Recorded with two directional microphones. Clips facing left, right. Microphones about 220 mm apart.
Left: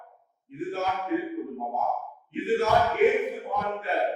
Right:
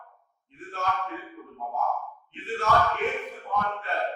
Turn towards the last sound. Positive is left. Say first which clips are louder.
# left 2 dB
turn(degrees=5)  # may be behind; listen again after turning